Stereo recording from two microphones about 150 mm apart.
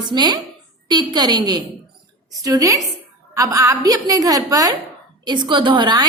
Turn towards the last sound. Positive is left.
turn(degrees=-30)  # may be behind; listen again after turning